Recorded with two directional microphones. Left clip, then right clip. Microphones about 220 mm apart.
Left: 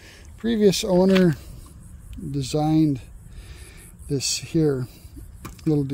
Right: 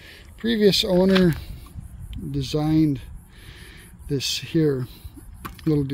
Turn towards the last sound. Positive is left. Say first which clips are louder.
# even
turn(degrees=0)  # may be behind; listen again after turning